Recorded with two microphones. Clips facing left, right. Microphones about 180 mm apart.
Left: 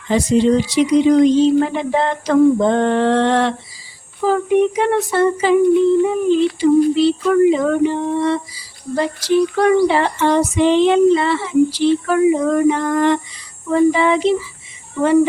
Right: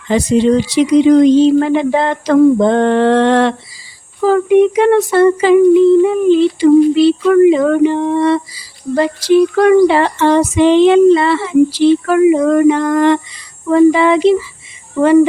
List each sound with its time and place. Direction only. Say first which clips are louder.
0.1 s speech: right 3 dB; 80° right
4.3 s speech: right 5 dB; 90° right